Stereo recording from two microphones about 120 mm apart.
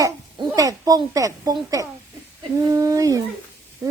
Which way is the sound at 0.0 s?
30° right (ahead or behind).